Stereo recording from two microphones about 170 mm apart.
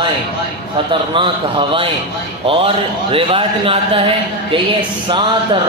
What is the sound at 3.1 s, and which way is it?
A man's voice, 30° right (ahead or behind).